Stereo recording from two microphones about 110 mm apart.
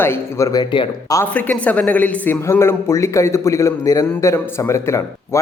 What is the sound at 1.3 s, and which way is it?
Speech, 15° left (ahead or behind).